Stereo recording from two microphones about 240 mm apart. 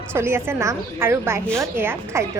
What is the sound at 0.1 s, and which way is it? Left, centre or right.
A woman's voice, centre.